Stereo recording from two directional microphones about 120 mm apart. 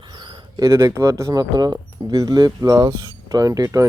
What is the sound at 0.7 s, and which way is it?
Speech, 25° right (ahead or behind).